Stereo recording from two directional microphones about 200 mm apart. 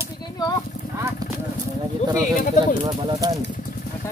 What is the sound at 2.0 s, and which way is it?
Speech, 35° left (ahead or behind).